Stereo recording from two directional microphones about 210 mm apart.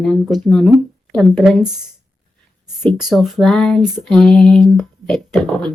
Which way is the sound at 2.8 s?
Centre (ahead or behind).